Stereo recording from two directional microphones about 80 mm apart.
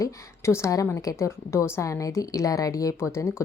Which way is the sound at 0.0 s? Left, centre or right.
Left.